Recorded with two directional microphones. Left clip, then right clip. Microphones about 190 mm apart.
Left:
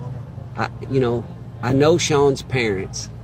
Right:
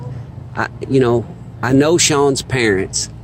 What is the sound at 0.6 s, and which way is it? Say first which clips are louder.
Speech: right 5 dB; 55° right (ahead or behind).